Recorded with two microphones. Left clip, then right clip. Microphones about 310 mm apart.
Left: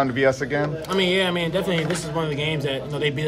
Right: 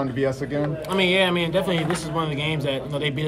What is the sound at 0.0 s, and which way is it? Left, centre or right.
Speech, left.